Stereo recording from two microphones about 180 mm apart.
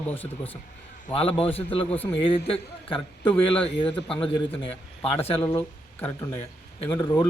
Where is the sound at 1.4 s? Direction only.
30° left (ahead or behind).